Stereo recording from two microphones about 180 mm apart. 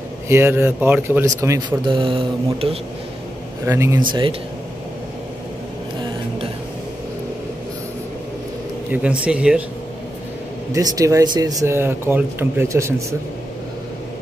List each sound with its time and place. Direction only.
0.3 s speech: 15° right (ahead or behind)
2.0 s speech: 30° right (ahead or behind)
3.6 s speech: 15° right (ahead or behind)
4.1 s speech: 25° right (ahead or behind)
8.9 s speech: 5° right (ahead or behind)
10.7 s speech: 20° right (ahead or behind)